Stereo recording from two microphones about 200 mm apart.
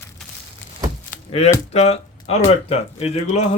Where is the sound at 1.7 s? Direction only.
30° left (ahead or behind).